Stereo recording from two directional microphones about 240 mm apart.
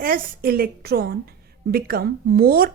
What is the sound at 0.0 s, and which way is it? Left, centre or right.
A woman's voice, right.